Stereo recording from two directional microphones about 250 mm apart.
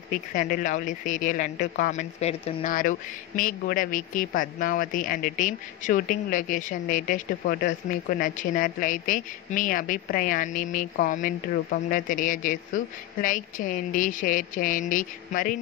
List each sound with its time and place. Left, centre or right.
0.3 s speech: left